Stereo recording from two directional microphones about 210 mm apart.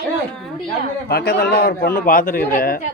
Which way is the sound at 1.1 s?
50° left (ahead or behind).